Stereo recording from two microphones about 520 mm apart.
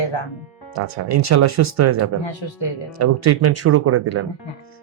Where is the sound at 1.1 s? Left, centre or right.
Right.